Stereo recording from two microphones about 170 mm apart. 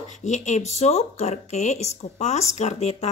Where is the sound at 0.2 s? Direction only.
45° left (ahead or behind).